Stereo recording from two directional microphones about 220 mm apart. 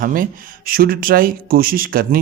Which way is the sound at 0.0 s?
40° right (ahead or behind).